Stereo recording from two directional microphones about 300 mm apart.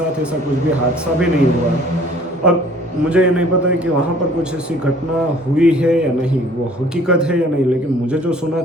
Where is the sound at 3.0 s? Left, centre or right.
Centre.